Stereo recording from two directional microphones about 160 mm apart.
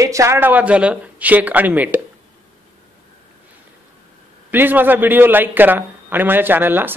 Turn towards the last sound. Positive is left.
turn(degrees=-10)  # may be behind; listen again after turning